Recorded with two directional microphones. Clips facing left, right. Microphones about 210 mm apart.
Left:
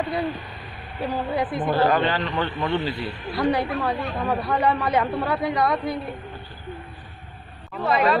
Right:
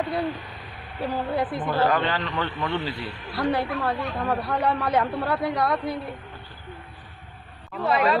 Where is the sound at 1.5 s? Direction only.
15° left (ahead or behind).